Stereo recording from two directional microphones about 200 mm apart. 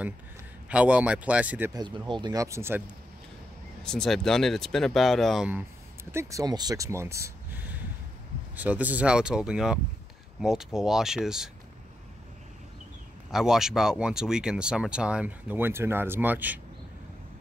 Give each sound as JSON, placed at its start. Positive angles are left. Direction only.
{"t": 0.7, "sound": "speech", "side_deg": -5}
{"t": 1.7, "sound": "speech", "side_deg": -20}
{"t": 3.8, "sound": "speech", "side_deg": 5}
{"t": 6.1, "sound": "speech", "side_deg": -15}
{"t": 13.3, "sound": "speech", "side_deg": 0}